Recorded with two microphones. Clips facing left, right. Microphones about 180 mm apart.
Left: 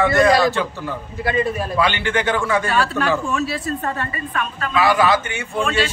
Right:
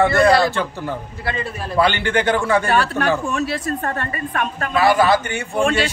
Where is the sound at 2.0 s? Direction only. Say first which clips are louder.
Right 2 dB; 45° right (ahead or behind).